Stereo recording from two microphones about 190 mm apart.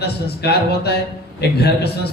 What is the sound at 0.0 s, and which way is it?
Speech, 60° left (ahead or behind).